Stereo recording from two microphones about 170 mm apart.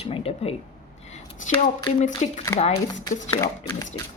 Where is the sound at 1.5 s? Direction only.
45° left (ahead or behind).